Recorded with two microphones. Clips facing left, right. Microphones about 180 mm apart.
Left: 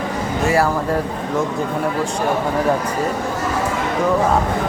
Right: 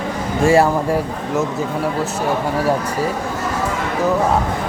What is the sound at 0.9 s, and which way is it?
Speech, 10° right (ahead or behind).